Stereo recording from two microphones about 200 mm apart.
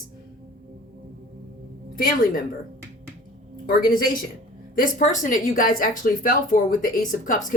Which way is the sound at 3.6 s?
45° left (ahead or behind).